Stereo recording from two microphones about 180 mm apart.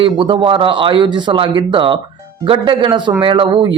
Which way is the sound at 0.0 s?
30° right (ahead or behind).